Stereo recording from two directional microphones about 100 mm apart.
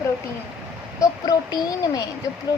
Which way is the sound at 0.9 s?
40° left (ahead or behind).